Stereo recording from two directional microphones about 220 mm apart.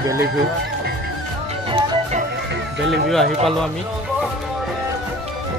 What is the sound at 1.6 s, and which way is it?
Music, 25° right (ahead or behind).